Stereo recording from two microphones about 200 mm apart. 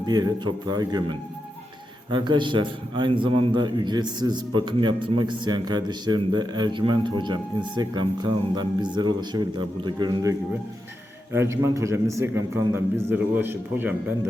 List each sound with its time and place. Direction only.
0.0 s a man's voice: 20° right (ahead or behind)
2.0 s a man's voice: 20° right (ahead or behind)